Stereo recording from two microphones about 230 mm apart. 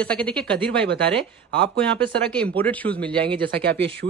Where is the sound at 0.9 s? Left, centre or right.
Right.